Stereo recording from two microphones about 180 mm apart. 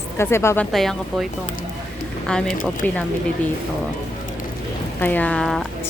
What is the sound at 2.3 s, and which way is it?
Speech, 5° left (ahead or behind).